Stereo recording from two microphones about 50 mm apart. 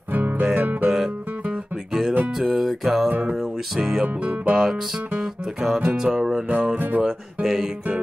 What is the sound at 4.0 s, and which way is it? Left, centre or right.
Speech, right.